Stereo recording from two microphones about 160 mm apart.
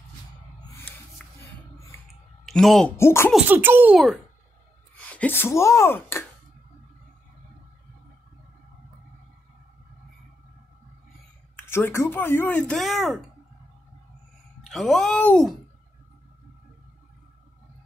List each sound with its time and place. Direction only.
1.2 s music: 5° left (ahead or behind)
2.4 s speech: centre (ahead or behind)
3.0 s speech: 15° left (ahead or behind)
3.4 s a child's voice: 10° right (ahead or behind)
4.9 s speech: 10° left (ahead or behind)
11.7 s speech: 15° left (ahead or behind); by 13.2 s centre (ahead or behind)
14.7 s speech: centre (ahead or behind)